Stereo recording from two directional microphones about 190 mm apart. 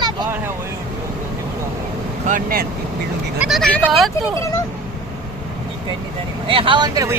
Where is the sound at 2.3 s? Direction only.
45° right (ahead or behind).